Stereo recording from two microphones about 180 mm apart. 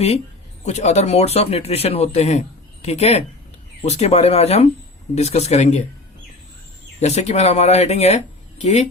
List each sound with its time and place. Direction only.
0.6 s speech: 40° left (ahead or behind)
7.0 s speech: 40° left (ahead or behind)